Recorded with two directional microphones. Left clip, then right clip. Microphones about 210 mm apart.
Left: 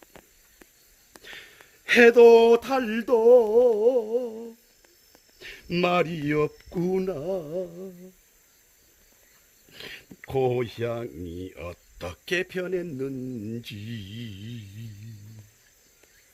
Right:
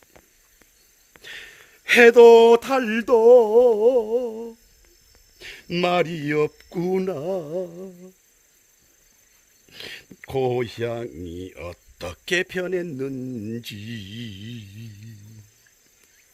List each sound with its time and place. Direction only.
0.0 s a sound: centre (ahead or behind)
1.2 s speech: 40° right (ahead or behind)
9.6 s speech: 35° right (ahead or behind)